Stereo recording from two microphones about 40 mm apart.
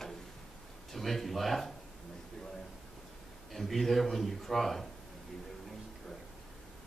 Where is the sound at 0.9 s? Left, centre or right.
Centre.